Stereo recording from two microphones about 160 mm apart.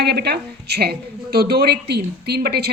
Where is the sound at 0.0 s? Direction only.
90° right.